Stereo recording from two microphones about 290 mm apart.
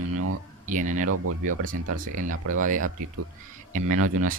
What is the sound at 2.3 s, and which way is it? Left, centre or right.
Speech, right.